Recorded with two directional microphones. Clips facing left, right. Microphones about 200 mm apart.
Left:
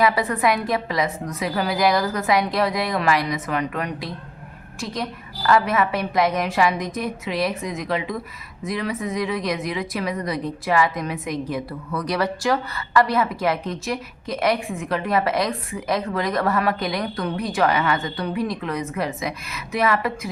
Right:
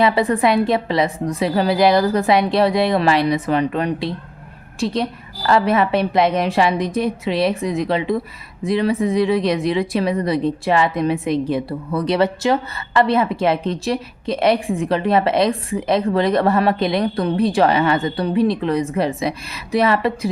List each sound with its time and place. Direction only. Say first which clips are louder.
0.0 s speech: right 4 dB; 30° right (ahead or behind)
5.5 s speech: right 3 dB; 30° right (ahead or behind)